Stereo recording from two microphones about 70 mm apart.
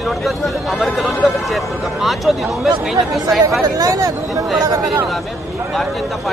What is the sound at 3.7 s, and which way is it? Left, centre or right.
Speech, right.